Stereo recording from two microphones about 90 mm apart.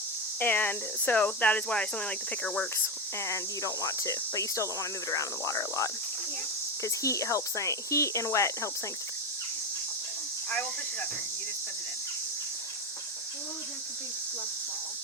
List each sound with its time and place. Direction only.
0.3 s speech: 20° left (ahead or behind)
2.7 s speech: 30° left (ahead or behind)